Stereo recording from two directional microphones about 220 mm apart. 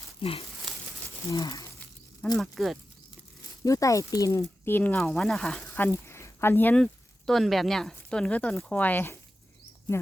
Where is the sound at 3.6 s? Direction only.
15° left (ahead or behind).